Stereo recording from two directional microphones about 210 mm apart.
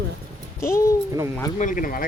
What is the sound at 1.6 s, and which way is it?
Speech, 40° left (ahead or behind).